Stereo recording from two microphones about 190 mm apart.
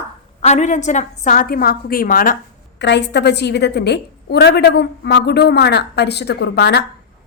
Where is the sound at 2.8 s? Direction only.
65° left (ahead or behind).